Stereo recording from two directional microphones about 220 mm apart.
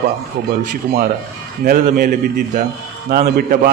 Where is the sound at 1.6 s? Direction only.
40° right (ahead or behind).